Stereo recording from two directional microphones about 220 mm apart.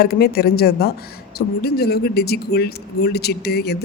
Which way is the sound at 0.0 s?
45° left (ahead or behind).